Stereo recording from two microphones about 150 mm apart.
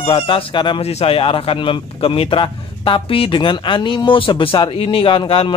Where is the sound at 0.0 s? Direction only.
35° left (ahead or behind).